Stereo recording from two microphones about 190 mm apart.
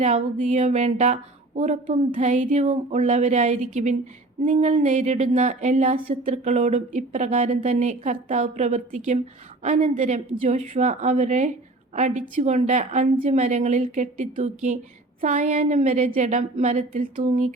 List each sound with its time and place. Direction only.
0.0 s a woman's voice: 40° right (ahead or behind)